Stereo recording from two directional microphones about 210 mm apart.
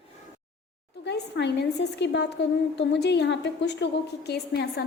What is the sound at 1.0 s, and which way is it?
A woman's voice, 55° left (ahead or behind).